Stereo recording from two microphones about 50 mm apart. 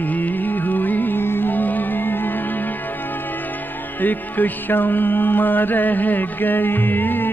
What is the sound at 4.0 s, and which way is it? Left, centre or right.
Music, left.